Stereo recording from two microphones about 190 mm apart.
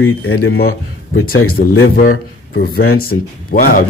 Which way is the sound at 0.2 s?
90° left.